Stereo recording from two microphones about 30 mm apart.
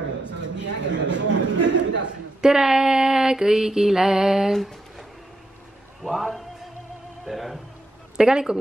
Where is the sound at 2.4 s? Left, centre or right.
Centre.